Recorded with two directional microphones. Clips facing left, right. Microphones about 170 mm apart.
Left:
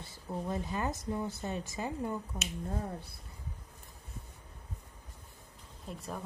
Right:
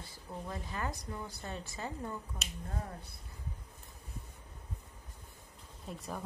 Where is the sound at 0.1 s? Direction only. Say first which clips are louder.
Left 7 dB; 25° left (ahead or behind).